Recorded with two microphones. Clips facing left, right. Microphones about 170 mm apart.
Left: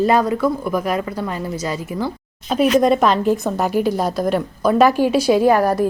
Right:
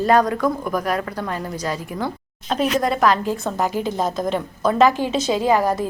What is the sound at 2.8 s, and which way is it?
Speech, 20° left (ahead or behind).